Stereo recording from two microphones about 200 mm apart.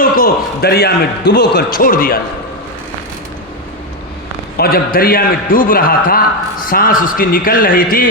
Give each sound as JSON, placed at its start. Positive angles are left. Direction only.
{"t": 0.0, "sound": "speech", "side_deg": 50}
{"t": 4.5, "sound": "speech", "side_deg": 50}